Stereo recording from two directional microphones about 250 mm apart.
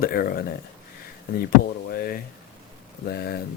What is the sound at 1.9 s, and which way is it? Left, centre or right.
Speech, left.